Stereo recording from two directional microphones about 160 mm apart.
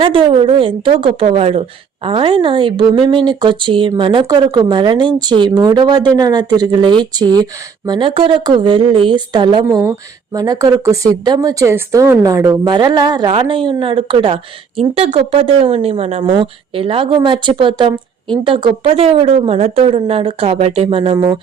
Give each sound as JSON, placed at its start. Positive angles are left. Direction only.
{"t": 0.0, "sound": "speech", "side_deg": -35}